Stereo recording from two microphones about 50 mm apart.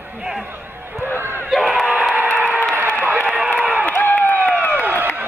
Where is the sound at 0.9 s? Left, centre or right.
Left.